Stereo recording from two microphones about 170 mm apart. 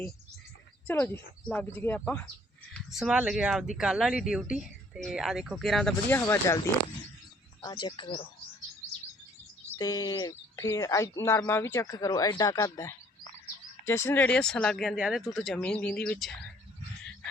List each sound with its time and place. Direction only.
0.9 s speech: 10° left (ahead or behind)
2.7 s speech: 5° right (ahead or behind); by 6.6 s 15° left (ahead or behind)
7.6 s speech: 25° left (ahead or behind)
9.7 s speech: 20° left (ahead or behind)